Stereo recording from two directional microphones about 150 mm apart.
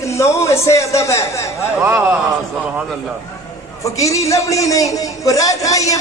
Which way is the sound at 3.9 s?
20° left (ahead or behind).